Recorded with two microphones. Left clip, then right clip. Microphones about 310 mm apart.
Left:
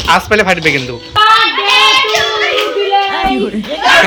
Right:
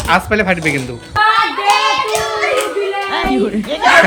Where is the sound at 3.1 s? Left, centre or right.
Centre.